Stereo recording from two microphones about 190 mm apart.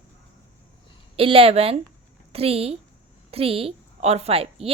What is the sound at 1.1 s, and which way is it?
A woman's voice, 30° right (ahead or behind).